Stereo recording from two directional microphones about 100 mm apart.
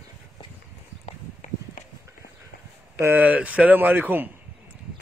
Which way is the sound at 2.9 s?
20° right (ahead or behind).